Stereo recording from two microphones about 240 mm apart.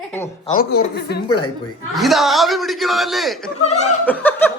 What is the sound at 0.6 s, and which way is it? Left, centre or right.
Speech, left.